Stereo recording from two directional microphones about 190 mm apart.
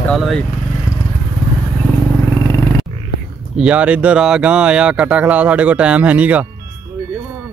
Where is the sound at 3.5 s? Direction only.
5° right (ahead or behind).